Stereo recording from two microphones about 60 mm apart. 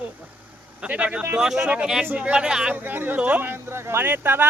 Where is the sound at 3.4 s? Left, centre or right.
Right.